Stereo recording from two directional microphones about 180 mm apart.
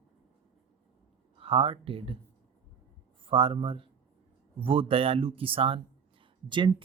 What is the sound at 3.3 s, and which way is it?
A woman's voice, 30° right (ahead or behind).